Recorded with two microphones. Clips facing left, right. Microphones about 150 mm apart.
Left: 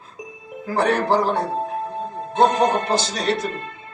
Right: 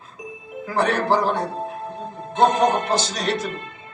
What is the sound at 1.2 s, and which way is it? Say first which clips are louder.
Speech: left 1 dB; 35° left (ahead or behind).